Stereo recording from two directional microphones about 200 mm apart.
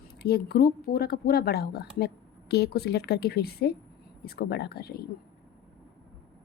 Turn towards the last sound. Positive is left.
turn(degrees=50)  # may be behind; listen again after turning